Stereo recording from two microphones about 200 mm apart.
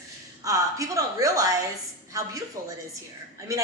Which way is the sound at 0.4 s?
15° right (ahead or behind).